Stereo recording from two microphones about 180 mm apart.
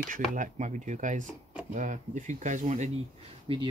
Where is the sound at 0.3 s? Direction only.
45° right (ahead or behind).